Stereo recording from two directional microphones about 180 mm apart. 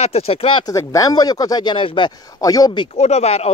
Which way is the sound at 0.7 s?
20° left (ahead or behind).